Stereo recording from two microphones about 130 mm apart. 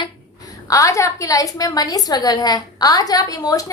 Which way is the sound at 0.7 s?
25° left (ahead or behind).